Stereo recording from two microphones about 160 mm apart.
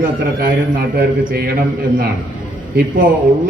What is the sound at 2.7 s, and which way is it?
Speech, 65° right (ahead or behind).